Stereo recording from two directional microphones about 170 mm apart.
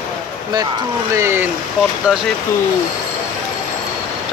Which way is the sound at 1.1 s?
15° right (ahead or behind).